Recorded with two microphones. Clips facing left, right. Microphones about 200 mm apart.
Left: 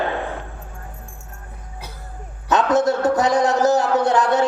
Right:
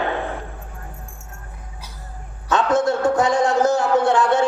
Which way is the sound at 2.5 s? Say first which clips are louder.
Left 1 dB; 20° left (ahead or behind).